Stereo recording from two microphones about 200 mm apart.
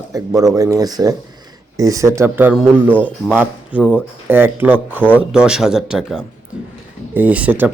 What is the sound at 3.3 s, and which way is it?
Speech, 5° right (ahead or behind).